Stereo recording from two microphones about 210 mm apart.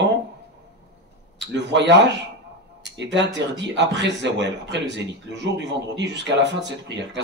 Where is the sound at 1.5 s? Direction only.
55° right (ahead or behind).